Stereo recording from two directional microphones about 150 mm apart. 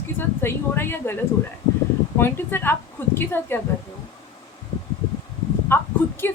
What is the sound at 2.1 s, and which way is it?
Speech, 15° left (ahead or behind).